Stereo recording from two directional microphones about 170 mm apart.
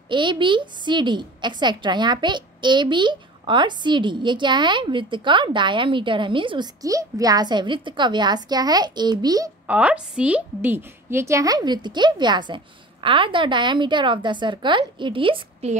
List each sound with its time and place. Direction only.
0.1 s a woman's voice: 30° right (ahead or behind)
9.7 s a woman's voice: 10° right (ahead or behind); by 15.7 s 30° right (ahead or behind)